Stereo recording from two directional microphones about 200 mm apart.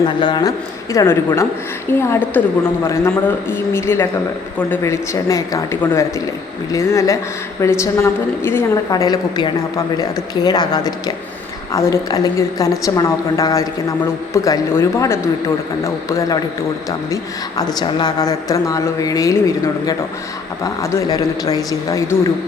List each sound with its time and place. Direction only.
0.2 s a woman's voice: 20° left (ahead or behind)
17.7 s speech: 20° left (ahead or behind)